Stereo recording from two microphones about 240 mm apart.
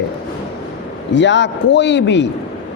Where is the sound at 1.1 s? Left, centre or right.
Left.